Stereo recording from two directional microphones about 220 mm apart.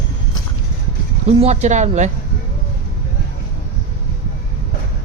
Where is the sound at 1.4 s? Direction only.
30° right (ahead or behind).